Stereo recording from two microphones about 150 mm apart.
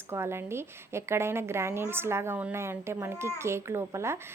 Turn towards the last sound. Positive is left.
turn(degrees=-20)  # may be behind; listen again after turning